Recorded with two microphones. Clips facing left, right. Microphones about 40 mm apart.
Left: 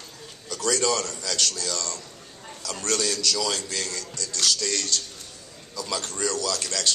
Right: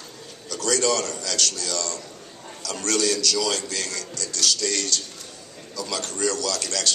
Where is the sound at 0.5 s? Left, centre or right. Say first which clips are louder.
Right 2 dB; centre.